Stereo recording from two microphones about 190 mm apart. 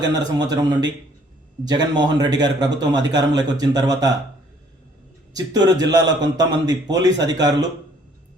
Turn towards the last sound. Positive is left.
turn(degrees=-20)  # may be behind; listen again after turning